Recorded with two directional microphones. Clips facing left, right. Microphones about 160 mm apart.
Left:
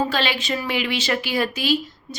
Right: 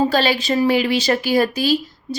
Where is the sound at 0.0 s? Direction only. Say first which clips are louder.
Right 6 dB; 40° right (ahead or behind).